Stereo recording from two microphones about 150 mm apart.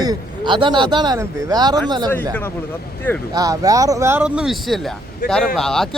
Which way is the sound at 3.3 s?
25° right (ahead or behind).